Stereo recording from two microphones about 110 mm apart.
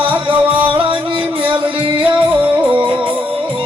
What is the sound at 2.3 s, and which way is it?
Music, 10° right (ahead or behind).